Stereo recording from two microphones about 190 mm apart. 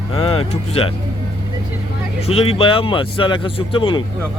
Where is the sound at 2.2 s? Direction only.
30° left (ahead or behind).